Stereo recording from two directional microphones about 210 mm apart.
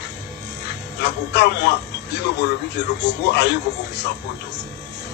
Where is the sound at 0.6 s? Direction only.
55° left (ahead or behind).